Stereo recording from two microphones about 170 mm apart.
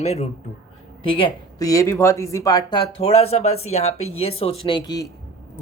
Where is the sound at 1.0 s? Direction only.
30° left (ahead or behind).